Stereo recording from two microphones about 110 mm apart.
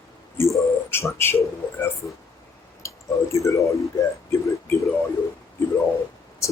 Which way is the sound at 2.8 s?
25° left (ahead or behind).